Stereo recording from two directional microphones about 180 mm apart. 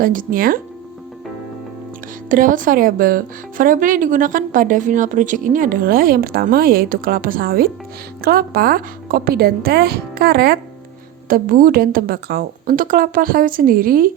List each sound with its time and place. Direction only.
0.0 s speech: 50° right (ahead or behind)
2.3 s a woman's voice: 50° right (ahead or behind)